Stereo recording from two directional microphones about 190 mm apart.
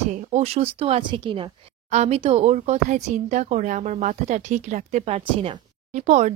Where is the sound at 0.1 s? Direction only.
35° right (ahead or behind).